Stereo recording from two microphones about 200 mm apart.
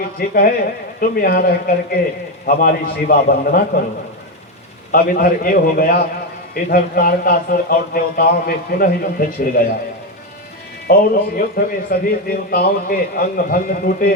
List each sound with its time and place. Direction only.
0.2 s a man's voice: 45° left (ahead or behind)
4.9 s a man's voice: 45° left (ahead or behind)
10.8 s a man's voice: 50° left (ahead or behind)